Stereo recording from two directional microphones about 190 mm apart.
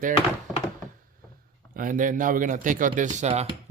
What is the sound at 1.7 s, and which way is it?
Speech, 45° right (ahead or behind).